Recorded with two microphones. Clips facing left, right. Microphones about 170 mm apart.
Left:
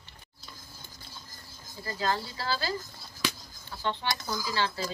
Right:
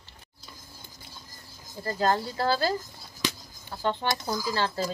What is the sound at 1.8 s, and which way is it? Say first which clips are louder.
Speech: right 5 dB; 50° right (ahead or behind).